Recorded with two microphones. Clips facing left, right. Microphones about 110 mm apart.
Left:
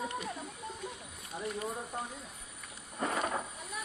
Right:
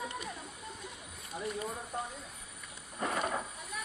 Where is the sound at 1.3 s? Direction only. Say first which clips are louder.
Even; 25° left (ahead or behind).